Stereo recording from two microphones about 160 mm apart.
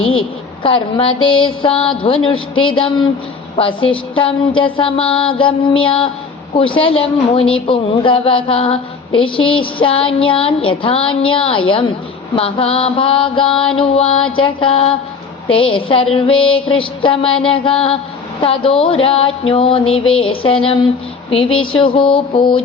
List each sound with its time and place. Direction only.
0.6 s speech: 35° left (ahead or behind)